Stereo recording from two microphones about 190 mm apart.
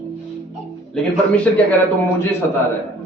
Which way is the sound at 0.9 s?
5° left (ahead or behind).